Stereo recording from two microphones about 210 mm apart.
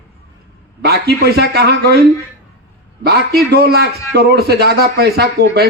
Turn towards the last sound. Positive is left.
turn(degrees=-50)  # may be behind; listen again after turning